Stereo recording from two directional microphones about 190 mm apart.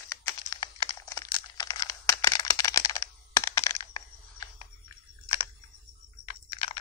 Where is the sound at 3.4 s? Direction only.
15° left (ahead or behind).